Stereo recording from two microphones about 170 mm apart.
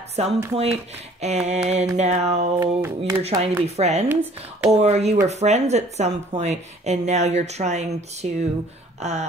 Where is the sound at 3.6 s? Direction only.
40° right (ahead or behind).